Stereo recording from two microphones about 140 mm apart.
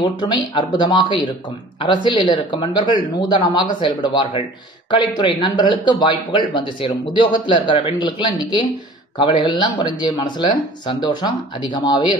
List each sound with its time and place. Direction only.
0.0 s speech: 35° left (ahead or behind)